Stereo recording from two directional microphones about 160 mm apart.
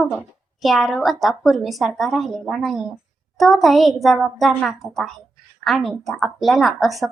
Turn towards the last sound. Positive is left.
turn(degrees=0)  # may be behind; listen again after turning